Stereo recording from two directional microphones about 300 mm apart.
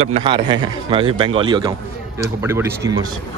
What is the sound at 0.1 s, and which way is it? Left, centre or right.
A man's voice, centre.